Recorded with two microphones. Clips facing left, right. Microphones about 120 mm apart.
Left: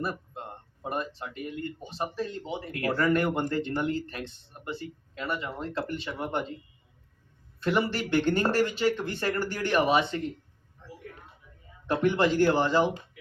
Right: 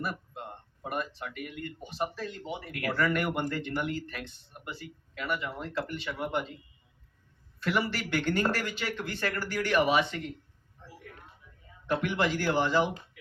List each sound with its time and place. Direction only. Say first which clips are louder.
0.0 s a sound: left 3 dB; 30° left (ahead or behind)
2.2 s speech: left 3 dB; 25° left (ahead or behind)
7.6 s speech: left 3 dB; 30° left (ahead or behind)
11.9 s speech: left 4 dB; 30° left (ahead or behind)